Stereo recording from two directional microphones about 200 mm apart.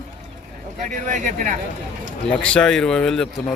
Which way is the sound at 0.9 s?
40° right (ahead or behind).